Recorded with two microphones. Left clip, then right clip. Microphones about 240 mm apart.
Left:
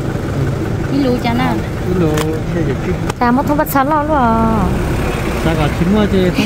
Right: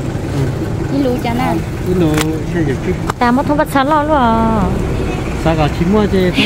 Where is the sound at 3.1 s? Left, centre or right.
Centre.